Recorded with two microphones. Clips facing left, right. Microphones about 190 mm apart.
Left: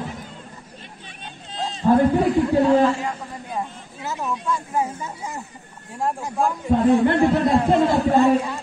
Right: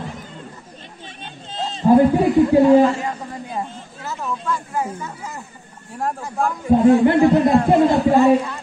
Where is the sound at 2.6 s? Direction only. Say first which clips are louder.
Right 4 dB; 15° right (ahead or behind).